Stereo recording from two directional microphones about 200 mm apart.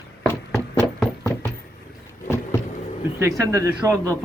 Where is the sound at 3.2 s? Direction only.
15° right (ahead or behind).